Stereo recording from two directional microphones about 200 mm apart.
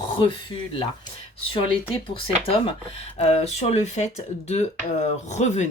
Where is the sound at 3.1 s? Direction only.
30° left (ahead or behind).